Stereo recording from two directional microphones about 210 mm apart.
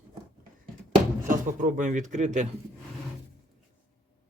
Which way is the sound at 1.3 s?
40° right (ahead or behind).